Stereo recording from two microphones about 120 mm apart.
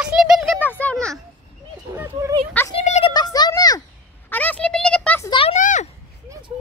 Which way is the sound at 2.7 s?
60° left (ahead or behind).